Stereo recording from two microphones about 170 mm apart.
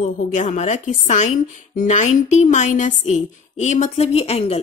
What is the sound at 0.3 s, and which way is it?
A woman's voice, 45° left (ahead or behind).